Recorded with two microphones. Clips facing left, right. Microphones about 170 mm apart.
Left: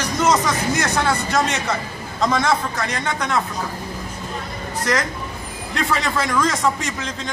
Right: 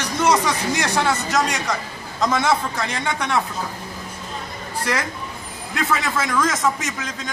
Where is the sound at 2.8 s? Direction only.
15° right (ahead or behind).